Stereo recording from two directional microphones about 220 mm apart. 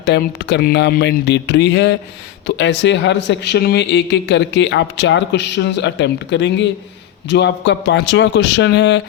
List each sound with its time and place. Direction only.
0.0 s a man's voice: 50° left (ahead or behind)